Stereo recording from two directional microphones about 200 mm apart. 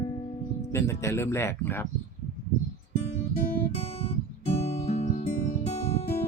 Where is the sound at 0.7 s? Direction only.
15° left (ahead or behind).